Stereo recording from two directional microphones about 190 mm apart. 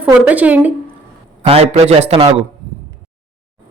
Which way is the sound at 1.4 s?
35° right (ahead or behind).